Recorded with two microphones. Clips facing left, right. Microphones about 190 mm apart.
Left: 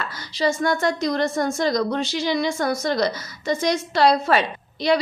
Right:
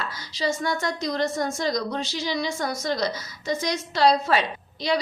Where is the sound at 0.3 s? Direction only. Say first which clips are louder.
Left 5 dB; 55° left (ahead or behind).